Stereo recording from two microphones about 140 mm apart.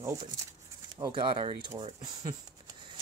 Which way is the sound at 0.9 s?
30° right (ahead or behind).